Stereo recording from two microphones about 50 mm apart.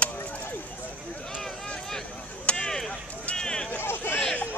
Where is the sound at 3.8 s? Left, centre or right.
Left.